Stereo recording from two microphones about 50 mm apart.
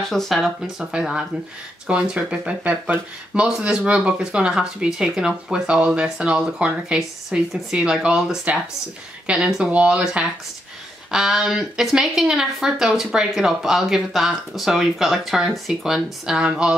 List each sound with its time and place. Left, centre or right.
0.0 s speech: centre
0.7 s speech: centre
9.3 s speech: centre
11.1 s speech: centre
16.3 s speech: centre